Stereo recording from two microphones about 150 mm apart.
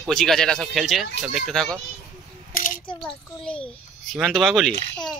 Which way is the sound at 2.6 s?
65° left (ahead or behind).